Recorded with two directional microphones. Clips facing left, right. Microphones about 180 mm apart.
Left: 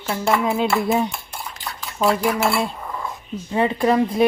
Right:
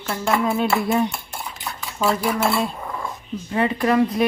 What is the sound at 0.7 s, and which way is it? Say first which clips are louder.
Cutlery: even; centre (ahead or behind).